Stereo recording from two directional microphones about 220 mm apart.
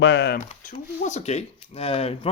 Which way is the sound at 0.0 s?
55° left (ahead or behind).